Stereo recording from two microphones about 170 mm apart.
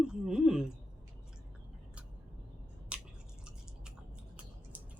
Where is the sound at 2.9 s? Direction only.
5° right (ahead or behind).